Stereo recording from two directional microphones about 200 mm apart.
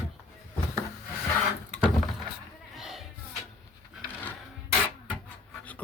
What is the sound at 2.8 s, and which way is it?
Music, centre (ahead or behind).